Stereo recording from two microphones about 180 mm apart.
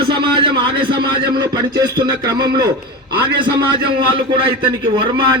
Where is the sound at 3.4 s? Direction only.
25° right (ahead or behind).